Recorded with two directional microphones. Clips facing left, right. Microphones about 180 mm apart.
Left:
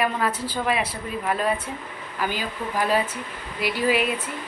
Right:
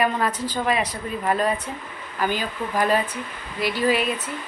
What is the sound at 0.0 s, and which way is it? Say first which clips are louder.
A woman's voice: right 2 dB; 5° left (ahead or behind).